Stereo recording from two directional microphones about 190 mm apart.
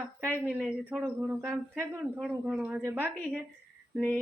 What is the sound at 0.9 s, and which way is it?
A woman's voice, 10° right (ahead or behind).